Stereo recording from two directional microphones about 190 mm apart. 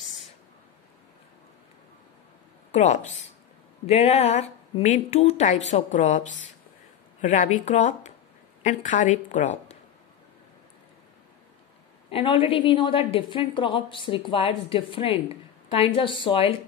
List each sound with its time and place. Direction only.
2.7 s speech: 35° left (ahead or behind)
12.1 s a woman's voice: 30° left (ahead or behind)